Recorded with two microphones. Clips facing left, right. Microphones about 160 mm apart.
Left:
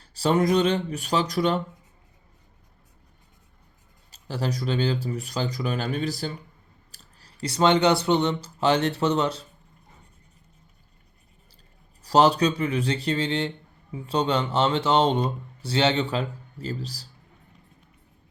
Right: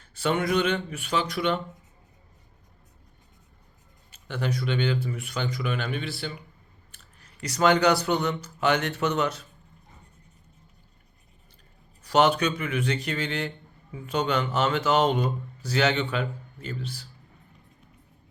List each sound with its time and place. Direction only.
0.0 s speech: 35° left (ahead or behind)
4.1 s speech: 35° left (ahead or behind)
12.0 s speech: 35° left (ahead or behind)